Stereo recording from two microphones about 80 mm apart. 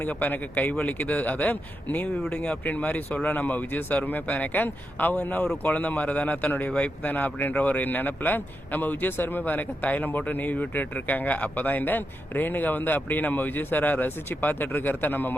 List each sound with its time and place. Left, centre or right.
0.0 s speech: left